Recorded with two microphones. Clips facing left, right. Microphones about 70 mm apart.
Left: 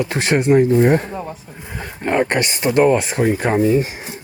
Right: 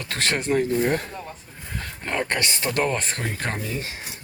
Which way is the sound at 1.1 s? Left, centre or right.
Centre.